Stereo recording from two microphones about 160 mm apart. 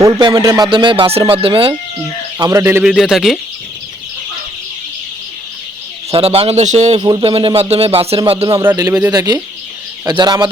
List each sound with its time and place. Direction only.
0.0 s speech: 30° right (ahead or behind)
2.4 s a man's voice: 20° right (ahead or behind)
2.8 s speech: centre (ahead or behind)
6.1 s speech: 35° right (ahead or behind)
7.0 s speech: 30° right (ahead or behind)
8.6 s a man's voice: 20° right (ahead or behind)